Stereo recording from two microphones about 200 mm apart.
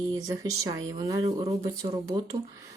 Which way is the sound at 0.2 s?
15° right (ahead or behind).